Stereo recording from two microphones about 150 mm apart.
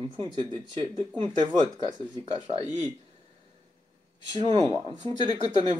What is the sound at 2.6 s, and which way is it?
Speech, 25° left (ahead or behind).